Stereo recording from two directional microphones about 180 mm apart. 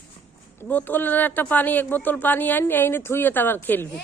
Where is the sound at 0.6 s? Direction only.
10° left (ahead or behind).